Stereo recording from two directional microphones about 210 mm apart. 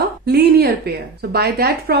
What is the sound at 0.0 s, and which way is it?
Speech, 50° right (ahead or behind).